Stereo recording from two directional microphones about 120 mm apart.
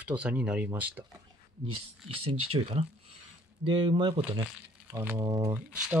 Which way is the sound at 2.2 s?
55° right (ahead or behind).